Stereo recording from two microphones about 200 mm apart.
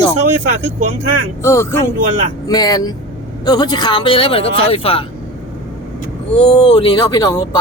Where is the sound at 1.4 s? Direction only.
15° left (ahead or behind); by 5.0 s 30° left (ahead or behind).